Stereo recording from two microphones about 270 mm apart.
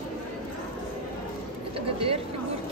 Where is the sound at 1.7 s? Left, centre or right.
Right.